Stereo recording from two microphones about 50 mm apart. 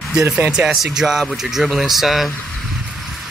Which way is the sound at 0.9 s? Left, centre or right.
Centre.